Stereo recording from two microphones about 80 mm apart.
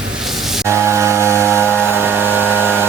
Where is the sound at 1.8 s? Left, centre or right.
Right.